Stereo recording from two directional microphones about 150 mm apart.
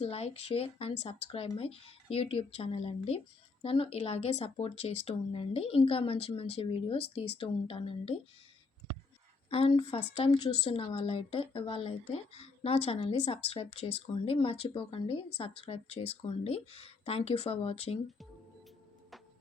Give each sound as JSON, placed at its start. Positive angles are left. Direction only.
{"t": 0.0, "sound": "speech", "side_deg": 45}
{"t": 9.5, "sound": "speech", "side_deg": 40}